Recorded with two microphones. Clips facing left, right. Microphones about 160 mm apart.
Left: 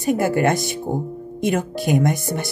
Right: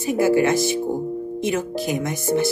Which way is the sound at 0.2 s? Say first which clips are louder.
Right 2 dB; 55° left (ahead or behind).